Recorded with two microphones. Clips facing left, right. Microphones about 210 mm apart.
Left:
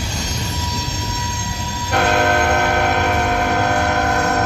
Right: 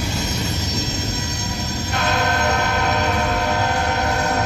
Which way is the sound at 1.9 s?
55° left (ahead or behind).